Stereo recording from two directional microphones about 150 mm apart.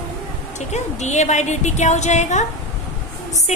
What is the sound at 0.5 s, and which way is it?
A woman's voice, 50° left (ahead or behind).